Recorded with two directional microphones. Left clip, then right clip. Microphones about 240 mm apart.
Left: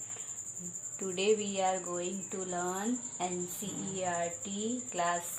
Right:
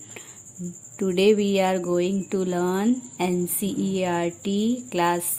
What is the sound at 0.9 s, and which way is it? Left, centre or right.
Speech, right.